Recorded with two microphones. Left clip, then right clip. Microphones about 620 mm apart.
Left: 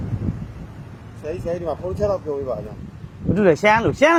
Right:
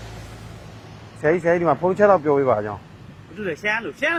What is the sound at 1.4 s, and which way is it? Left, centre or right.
Speech, right.